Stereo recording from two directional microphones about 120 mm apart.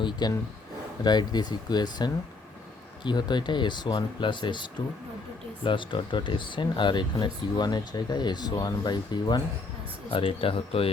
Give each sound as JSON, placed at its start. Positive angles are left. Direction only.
{"t": 0.0, "sound": "speech", "side_deg": 35}
{"t": 5.6, "sound": "speech", "side_deg": 45}
{"t": 10.1, "sound": "speech", "side_deg": 50}